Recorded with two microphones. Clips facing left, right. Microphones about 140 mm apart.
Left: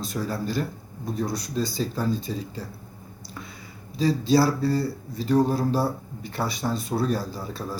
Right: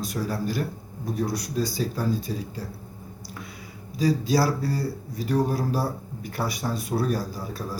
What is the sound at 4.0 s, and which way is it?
Speech, 10° right (ahead or behind).